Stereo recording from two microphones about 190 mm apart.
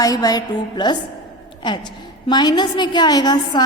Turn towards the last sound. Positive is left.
turn(degrees=20)  # may be behind; listen again after turning